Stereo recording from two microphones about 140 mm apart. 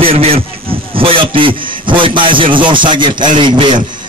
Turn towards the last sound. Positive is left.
turn(degrees=-35)  # may be behind; listen again after turning